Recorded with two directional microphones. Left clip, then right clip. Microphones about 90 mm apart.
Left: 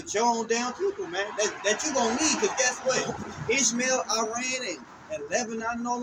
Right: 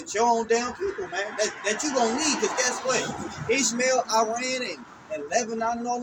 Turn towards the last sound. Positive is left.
turn(degrees=20)  # may be behind; listen again after turning